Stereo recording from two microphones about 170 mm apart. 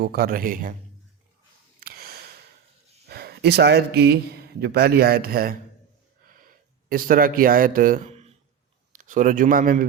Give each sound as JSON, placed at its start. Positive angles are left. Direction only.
{"t": 0.0, "sound": "speech", "side_deg": -65}
{"t": 1.8, "sound": "sniff", "side_deg": -65}
{"t": 3.1, "sound": "speech", "side_deg": -70}
{"t": 6.8, "sound": "a man's voice", "side_deg": -55}